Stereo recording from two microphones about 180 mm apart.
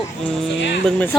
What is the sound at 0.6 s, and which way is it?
Speech, 75° left (ahead or behind).